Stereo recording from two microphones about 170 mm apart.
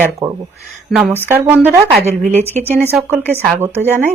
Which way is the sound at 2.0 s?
45° right (ahead or behind).